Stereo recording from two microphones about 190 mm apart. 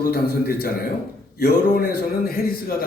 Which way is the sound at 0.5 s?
55° left (ahead or behind).